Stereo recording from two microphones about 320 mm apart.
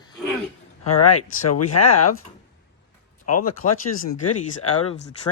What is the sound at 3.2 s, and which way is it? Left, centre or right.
Speech, left.